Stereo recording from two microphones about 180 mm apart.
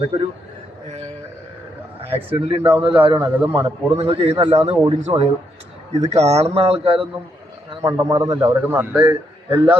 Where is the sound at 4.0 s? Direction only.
30° right (ahead or behind).